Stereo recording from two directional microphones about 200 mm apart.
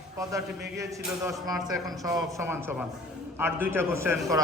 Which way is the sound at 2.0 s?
15° right (ahead or behind).